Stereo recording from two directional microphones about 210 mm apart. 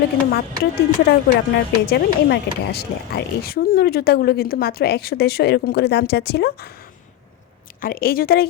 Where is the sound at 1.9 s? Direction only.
50° left (ahead or behind).